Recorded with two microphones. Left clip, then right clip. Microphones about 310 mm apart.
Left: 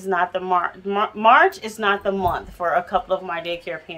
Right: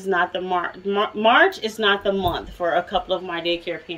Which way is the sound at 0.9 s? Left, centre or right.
Centre.